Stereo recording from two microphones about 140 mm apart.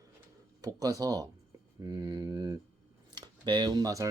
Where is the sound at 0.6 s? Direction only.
25° right (ahead or behind).